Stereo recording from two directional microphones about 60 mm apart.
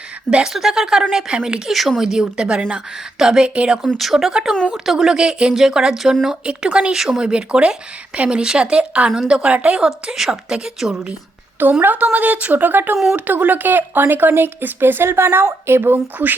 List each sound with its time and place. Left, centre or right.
0.3 s speech: centre
3.9 s speech: centre
11.8 s speech: right
16.1 s speech: right